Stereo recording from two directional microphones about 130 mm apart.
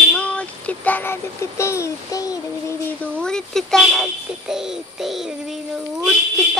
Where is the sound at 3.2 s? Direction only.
5° left (ahead or behind).